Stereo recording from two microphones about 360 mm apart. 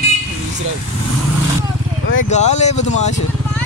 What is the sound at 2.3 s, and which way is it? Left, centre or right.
Speech, centre.